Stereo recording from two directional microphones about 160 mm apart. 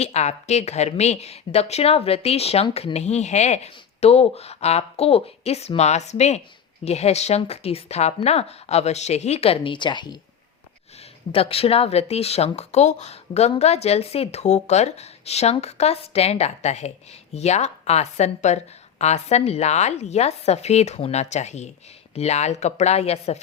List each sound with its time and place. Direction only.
0.0 s speech: 45° left (ahead or behind)
11.3 s speech: 35° left (ahead or behind)